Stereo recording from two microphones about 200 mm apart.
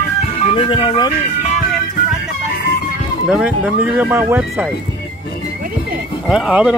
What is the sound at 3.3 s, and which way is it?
Speech, 5° right (ahead or behind).